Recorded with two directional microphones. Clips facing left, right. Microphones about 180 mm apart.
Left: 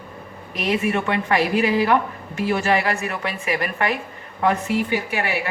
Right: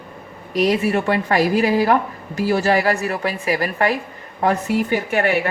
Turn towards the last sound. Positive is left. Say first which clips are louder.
# right 5 dB
turn(degrees=-50)  # may be behind; listen again after turning